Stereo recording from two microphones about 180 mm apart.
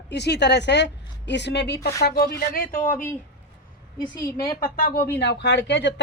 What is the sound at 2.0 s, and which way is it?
Speech, 60° left (ahead or behind).